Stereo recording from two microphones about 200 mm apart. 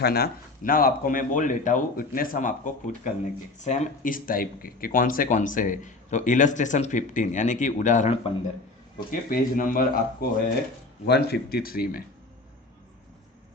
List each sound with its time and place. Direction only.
0.0 s speech: 50° left (ahead or behind); by 8.3 s 30° left (ahead or behind)
9.0 s speech: 45° left (ahead or behind)